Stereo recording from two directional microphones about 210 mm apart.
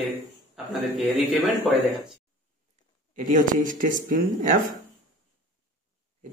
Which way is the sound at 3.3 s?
40° right (ahead or behind).